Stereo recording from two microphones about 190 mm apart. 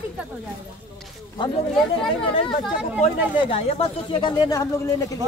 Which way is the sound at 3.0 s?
30° left (ahead or behind).